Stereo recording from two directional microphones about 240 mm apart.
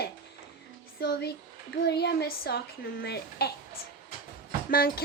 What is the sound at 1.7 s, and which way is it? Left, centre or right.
A woman's voice, left.